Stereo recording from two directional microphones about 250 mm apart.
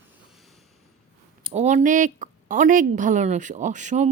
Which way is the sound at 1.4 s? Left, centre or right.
Right.